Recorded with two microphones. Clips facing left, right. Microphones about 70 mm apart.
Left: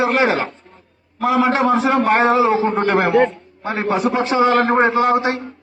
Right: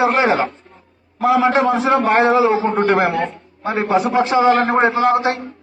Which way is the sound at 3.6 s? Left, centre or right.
Centre.